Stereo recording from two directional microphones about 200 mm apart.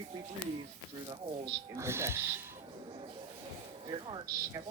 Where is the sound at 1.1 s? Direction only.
20° right (ahead or behind).